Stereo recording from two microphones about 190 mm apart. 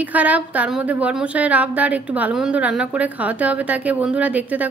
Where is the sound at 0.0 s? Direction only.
10° right (ahead or behind).